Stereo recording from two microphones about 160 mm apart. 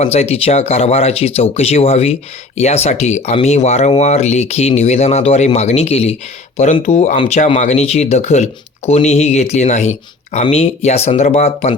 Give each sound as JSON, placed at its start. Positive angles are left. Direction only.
{"t": 0.0, "sound": "speech", "side_deg": 40}